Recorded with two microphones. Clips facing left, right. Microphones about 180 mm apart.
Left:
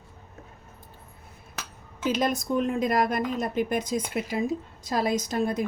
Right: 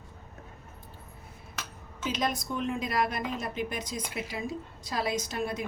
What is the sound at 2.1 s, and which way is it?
A woman's voice, 50° left (ahead or behind).